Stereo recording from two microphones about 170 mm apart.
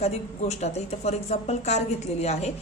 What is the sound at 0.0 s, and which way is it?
A woman's voice, 40° left (ahead or behind).